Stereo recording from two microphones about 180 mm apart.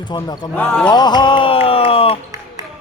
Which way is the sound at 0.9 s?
25° left (ahead or behind).